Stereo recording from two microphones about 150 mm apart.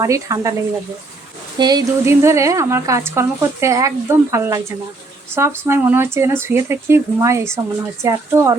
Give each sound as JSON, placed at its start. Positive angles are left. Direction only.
{"t": 0.0, "sound": "speech", "side_deg": -20}
{"t": 1.5, "sound": "speech", "side_deg": -25}